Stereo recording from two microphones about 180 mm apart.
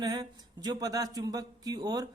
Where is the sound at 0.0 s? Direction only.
20° right (ahead or behind).